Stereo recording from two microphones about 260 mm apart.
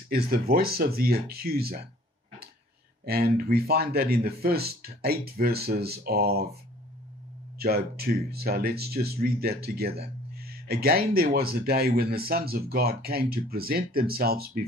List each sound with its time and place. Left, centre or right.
0.1 s speech: right
3.1 s speech: right
7.5 s speech: right
10.3 s a sound: right
11.3 s speech: right